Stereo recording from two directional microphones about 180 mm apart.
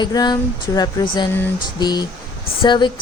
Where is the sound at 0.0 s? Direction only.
25° left (ahead or behind).